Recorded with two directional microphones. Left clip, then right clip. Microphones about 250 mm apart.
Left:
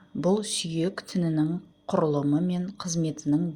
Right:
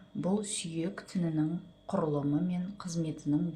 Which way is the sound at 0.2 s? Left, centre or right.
Left.